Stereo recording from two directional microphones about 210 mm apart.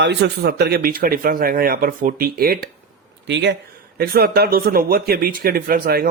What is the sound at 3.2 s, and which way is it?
Speech, 55° right (ahead or behind).